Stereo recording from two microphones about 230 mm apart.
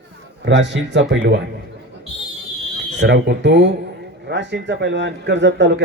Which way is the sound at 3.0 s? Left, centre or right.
Right.